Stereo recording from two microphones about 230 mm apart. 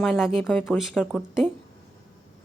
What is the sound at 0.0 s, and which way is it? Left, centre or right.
A woman's voice, centre.